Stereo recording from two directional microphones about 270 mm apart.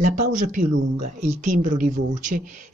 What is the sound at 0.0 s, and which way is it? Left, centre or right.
A woman's voice, right.